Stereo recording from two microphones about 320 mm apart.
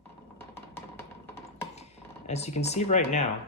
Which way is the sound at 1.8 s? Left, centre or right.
Centre.